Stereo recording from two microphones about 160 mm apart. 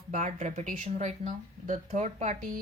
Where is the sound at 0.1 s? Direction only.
50° right (ahead or behind).